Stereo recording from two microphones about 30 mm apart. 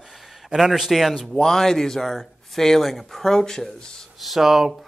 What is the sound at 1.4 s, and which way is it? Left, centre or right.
Speech, centre.